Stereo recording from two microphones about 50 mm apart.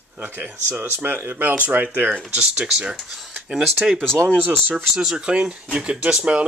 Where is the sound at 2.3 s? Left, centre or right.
Centre.